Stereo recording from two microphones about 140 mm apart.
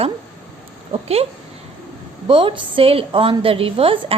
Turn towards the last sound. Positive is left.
turn(degrees=-40)  # may be behind; listen again after turning